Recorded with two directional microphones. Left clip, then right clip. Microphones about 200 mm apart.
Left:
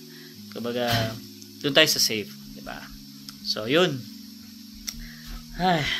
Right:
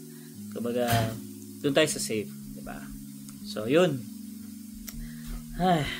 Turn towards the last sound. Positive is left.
turn(degrees=0)  # may be behind; listen again after turning